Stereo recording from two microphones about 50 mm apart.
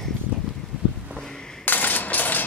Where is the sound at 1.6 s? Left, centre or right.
Left.